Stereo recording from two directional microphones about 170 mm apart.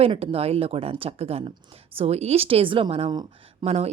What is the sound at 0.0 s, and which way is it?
Speech, 35° right (ahead or behind).